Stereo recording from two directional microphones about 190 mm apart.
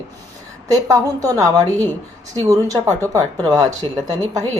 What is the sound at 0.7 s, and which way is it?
A woman's voice, 20° right (ahead or behind).